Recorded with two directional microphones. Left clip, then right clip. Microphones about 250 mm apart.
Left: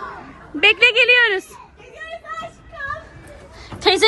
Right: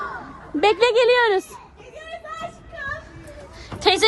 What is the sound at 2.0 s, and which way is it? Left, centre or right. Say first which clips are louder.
Children playing: left 2 dB; centre.